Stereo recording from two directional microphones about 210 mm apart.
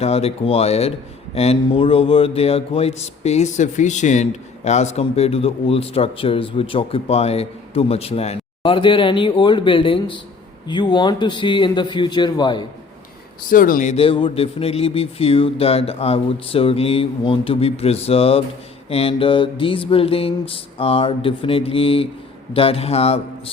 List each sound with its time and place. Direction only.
0.0 s speech: 30° left (ahead or behind)
13.5 s speech: 40° left (ahead or behind)